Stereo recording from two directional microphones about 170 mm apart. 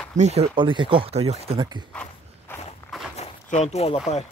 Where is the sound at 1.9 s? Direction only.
5° left (ahead or behind).